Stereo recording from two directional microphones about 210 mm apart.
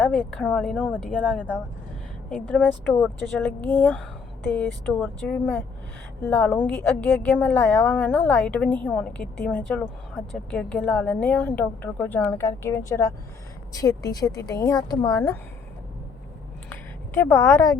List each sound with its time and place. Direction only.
0.3 s speech: 5° left (ahead or behind)
2.3 s a woman's voice: 10° left (ahead or behind)
17.2 s a woman's voice: 10° left (ahead or behind)